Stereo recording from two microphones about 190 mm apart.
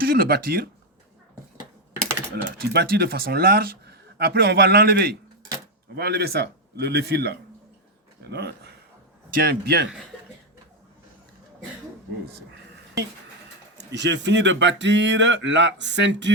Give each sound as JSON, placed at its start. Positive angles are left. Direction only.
{"t": 0.0, "sound": "speech", "side_deg": -50}
{"t": 2.4, "sound": "speech", "side_deg": -60}
{"t": 13.9, "sound": "speech", "side_deg": -65}